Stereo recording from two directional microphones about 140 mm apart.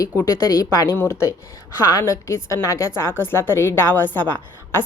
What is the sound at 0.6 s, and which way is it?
A woman's voice, 25° left (ahead or behind).